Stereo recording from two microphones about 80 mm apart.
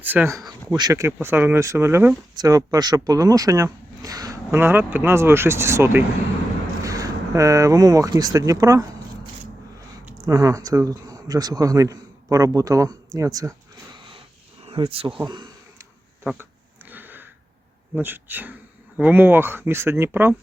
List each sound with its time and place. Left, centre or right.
0.0 s speech: right
0.7 s speech: right
0.9 s speech: right
2.3 s a man's voice: right
4.5 s speech: right
6.8 s speech: right
10.2 s a man's voice: right
14.8 s speech: right
16.9 s a sound: right
17.9 s speech: right